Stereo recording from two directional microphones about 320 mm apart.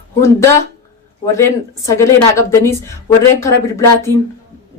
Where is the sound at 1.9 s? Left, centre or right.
Centre.